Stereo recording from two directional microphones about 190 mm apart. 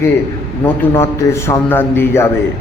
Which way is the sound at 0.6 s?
15° left (ahead or behind).